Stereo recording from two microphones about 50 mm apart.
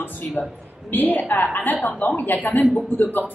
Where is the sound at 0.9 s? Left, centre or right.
Left.